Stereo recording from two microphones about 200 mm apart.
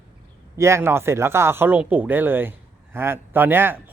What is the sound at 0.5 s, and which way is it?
Speech, 15° right (ahead or behind).